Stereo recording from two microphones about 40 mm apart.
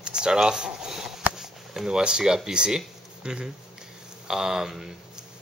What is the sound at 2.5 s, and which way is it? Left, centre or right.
A man's voice, right.